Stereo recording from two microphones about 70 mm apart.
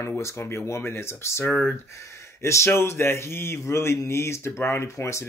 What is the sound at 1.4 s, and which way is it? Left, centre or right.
Speech, left.